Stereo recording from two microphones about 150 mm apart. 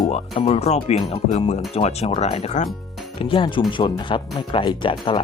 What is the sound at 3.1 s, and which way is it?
Speech, 35° left (ahead or behind).